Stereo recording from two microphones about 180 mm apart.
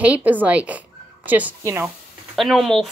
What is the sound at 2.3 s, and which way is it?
Speech, centre (ahead or behind).